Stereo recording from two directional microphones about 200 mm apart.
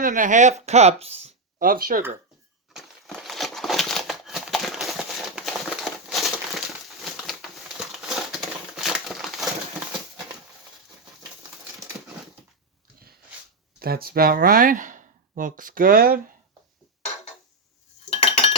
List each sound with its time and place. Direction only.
0.0 s speech: 40° right (ahead or behind)
2.7 s a sound: centre (ahead or behind)
13.7 s speech: 50° right (ahead or behind)
18.1 s cutlery: 30° left (ahead or behind)